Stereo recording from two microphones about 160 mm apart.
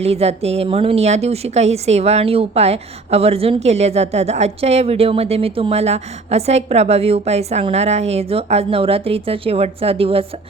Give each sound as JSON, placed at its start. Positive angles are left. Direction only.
{"t": 0.0, "sound": "a woman's voice", "side_deg": -40}